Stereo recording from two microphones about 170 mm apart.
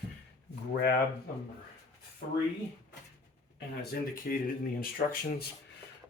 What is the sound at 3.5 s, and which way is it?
Speech, 65° left (ahead or behind).